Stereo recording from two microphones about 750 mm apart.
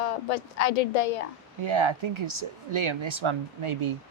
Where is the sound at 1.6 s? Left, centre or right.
Right.